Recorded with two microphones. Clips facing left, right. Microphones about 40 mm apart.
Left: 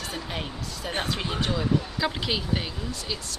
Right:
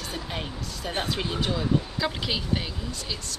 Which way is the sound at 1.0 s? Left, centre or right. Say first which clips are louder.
Right 1 dB; centre.